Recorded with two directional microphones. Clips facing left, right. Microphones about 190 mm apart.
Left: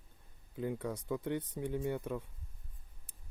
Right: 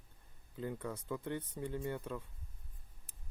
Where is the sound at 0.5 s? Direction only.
15° left (ahead or behind).